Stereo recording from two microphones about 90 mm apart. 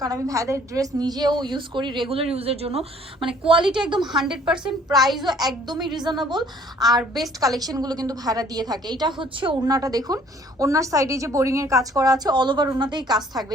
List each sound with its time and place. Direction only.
0.0 s a woman's voice: 40° right (ahead or behind); by 2.7 s 90° right
3.2 s a woman's voice: 75° right (ahead or behind)
3.8 s a woman's voice: 60° right (ahead or behind)
4.1 s a child's voice: 5° right (ahead or behind)
5.6 s a woman's voice: 55° right (ahead or behind); by 9.6 s 70° right (ahead or behind)
9.6 s a woman's voice: 45° right (ahead or behind)